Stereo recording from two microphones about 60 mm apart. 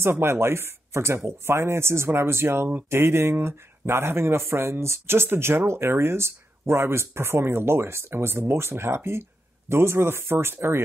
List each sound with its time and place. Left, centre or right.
0.0 s speech: right